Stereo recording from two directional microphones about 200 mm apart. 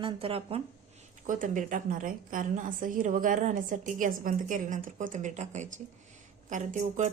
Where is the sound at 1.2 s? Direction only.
40° right (ahead or behind).